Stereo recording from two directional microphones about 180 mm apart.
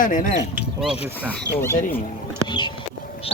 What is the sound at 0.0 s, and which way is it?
Speech, 45° left (ahead or behind).